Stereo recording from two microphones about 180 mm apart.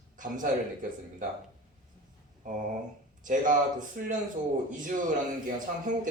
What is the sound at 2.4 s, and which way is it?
Speech, 45° right (ahead or behind).